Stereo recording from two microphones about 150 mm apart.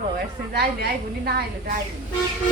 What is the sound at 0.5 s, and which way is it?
A woman's voice, 90° right.